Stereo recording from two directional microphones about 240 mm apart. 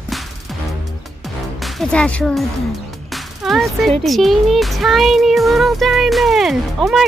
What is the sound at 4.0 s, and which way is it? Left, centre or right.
Speech, centre.